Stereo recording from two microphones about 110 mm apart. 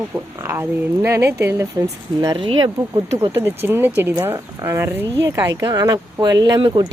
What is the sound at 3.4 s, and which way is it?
Speech, 20° right (ahead or behind).